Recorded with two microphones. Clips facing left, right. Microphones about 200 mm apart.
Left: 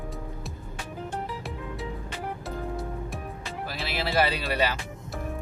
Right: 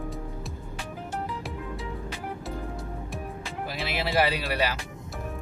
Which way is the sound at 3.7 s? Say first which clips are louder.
Right 1 dB; 20° right (ahead or behind).